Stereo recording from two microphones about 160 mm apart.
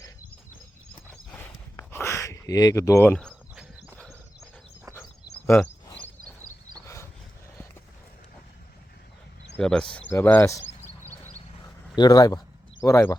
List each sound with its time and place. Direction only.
1.3 s horse: 10° left (ahead or behind)
1.9 s a sound: 15° left (ahead or behind)
3.1 s speech: 5° left (ahead or behind)
3.5 s horse: 5° right (ahead or behind)
3.9 s horse: 10° left (ahead or behind)
6.8 s a sound: 15° left (ahead or behind)
9.6 s speech: 5° left (ahead or behind)
11.9 s speech: 25° left (ahead or behind)